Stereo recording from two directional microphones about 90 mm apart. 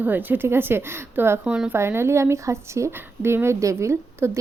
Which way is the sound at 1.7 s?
25° right (ahead or behind).